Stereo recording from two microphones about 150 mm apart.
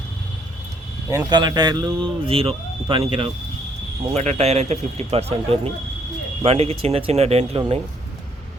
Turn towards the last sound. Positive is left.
turn(degrees=-40)  # may be behind; listen again after turning